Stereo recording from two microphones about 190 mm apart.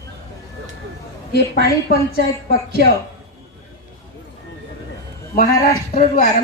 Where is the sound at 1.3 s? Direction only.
60° left (ahead or behind).